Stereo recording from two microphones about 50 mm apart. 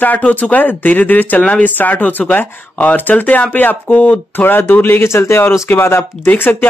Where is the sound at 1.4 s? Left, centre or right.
Left.